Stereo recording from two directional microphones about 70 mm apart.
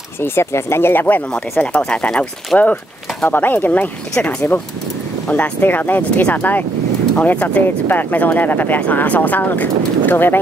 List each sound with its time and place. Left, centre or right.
0.2 s speech: left
1.6 s speech: centre
3.3 s speech: left